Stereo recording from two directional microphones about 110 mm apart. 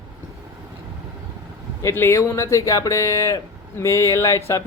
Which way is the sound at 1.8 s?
25° left (ahead or behind).